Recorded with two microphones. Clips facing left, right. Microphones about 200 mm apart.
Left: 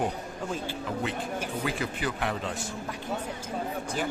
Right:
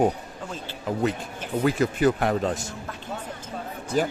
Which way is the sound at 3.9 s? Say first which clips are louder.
Right 9 dB; 45° right (ahead or behind).